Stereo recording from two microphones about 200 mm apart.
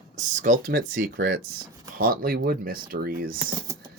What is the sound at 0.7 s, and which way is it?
Speech, 50° right (ahead or behind).